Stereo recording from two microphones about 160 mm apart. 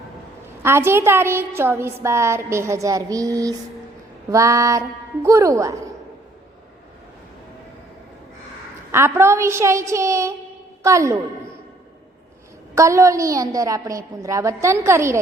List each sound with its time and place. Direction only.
0.6 s a woman's voice: 15° right (ahead or behind)
8.9 s a woman's voice: 15° right (ahead or behind)
12.7 s a woman's voice: 20° right (ahead or behind)